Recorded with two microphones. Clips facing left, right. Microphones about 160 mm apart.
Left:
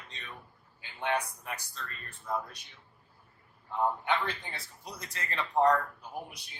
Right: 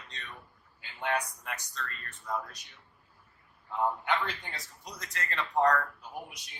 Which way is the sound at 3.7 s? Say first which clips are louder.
Even; centre (ahead or behind).